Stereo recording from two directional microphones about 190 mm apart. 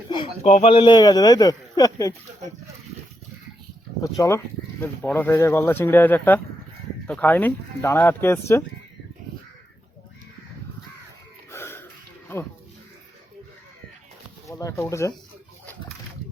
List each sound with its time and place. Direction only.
0.4 s speech: 35° left (ahead or behind)
0.7 s a man's voice: 25° left (ahead or behind)
4.0 s speech: 15° left (ahead or behind)
11.5 s a sound: 10° left (ahead or behind)
14.4 s speech: 15° left (ahead or behind)